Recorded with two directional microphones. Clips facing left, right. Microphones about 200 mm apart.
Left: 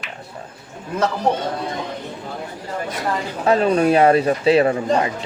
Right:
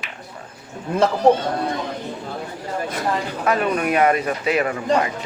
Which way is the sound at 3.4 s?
30° left (ahead or behind).